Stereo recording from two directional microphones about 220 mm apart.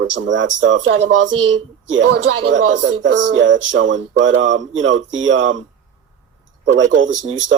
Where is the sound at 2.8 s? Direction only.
60° right (ahead or behind).